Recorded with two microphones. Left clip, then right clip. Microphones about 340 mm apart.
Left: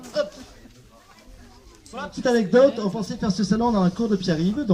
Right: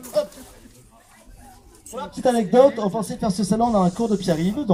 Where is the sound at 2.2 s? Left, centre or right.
Centre.